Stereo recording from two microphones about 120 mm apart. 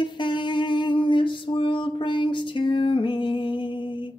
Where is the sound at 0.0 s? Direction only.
40° left (ahead or behind).